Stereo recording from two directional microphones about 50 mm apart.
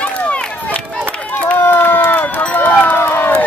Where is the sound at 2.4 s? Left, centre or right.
Left.